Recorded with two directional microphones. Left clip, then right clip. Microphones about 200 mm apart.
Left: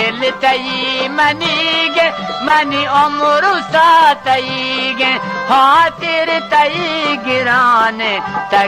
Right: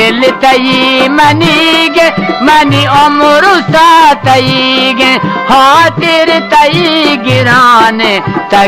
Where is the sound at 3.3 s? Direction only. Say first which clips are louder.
Right 7 dB; 10° left (ahead or behind).